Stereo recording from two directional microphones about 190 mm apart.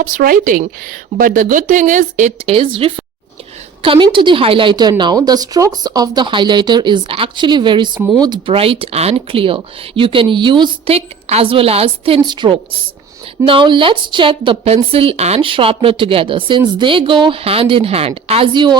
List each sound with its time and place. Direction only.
0.0 s a woman's voice: 50° right (ahead or behind); by 18.8 s 25° right (ahead or behind)